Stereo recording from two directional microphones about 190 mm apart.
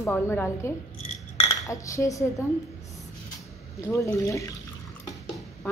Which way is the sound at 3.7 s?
15° left (ahead or behind).